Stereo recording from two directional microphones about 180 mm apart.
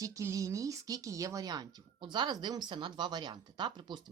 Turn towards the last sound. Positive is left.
turn(degrees=-25)  # may be behind; listen again after turning